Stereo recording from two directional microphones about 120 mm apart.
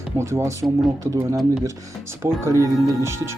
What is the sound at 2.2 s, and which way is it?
Speech, 25° right (ahead or behind).